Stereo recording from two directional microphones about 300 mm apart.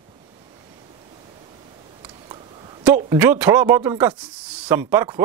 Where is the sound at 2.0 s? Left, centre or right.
Centre.